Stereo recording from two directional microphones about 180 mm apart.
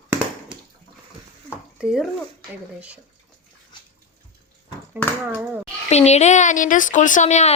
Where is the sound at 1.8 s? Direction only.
5° right (ahead or behind).